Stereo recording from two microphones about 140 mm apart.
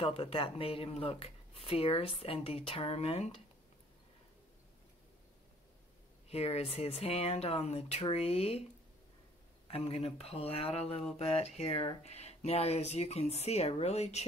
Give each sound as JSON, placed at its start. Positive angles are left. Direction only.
{"t": 0.0, "sound": "speech", "side_deg": 40}
{"t": 6.2, "sound": "speech", "side_deg": 50}
{"t": 9.7, "sound": "speech", "side_deg": 45}